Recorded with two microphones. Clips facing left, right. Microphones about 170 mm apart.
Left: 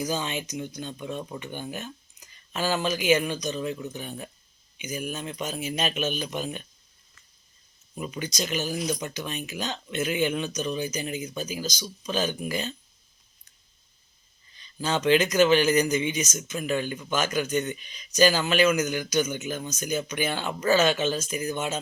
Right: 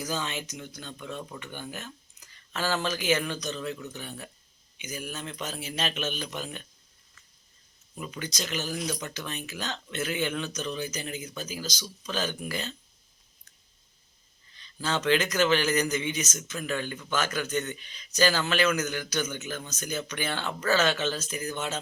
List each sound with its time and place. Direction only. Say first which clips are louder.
0.0 s speech: left 4 dB; 15° left (ahead or behind)
7.9 s speech: left 4 dB; 15° left (ahead or behind)
14.5 s speech: left 3 dB; 15° left (ahead or behind)